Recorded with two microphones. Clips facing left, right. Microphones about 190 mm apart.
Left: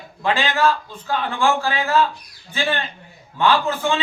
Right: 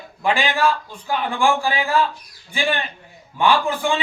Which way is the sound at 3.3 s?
15° right (ahead or behind).